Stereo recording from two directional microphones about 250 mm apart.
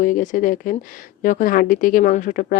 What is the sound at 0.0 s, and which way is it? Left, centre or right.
Speech, left.